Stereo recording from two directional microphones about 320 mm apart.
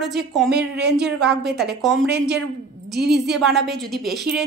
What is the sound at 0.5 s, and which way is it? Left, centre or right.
Speech, right.